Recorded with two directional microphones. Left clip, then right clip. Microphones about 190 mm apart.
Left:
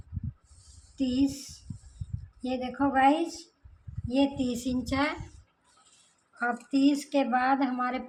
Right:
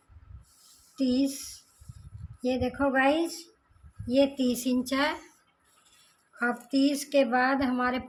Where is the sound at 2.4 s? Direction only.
50° right (ahead or behind).